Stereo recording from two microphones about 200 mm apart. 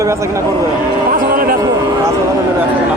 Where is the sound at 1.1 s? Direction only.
45° right (ahead or behind).